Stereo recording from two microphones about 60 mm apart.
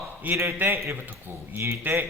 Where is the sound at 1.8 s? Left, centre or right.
Right.